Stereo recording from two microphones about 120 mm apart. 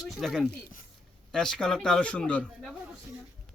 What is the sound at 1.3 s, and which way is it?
A man's voice, 5° left (ahead or behind).